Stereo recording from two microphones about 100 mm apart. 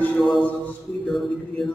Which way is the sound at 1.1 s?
Centre (ahead or behind).